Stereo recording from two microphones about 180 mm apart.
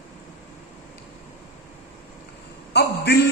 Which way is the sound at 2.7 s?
65° left (ahead or behind).